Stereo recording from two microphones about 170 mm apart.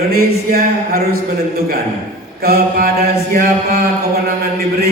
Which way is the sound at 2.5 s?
60° right (ahead or behind).